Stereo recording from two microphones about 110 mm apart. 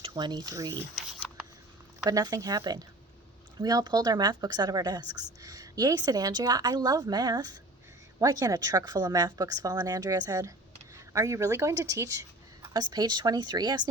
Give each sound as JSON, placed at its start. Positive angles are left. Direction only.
{"t": 0.1, "sound": "speech", "side_deg": -40}
{"t": 2.0, "sound": "speech", "side_deg": -35}
{"t": 12.7, "sound": "speech", "side_deg": -40}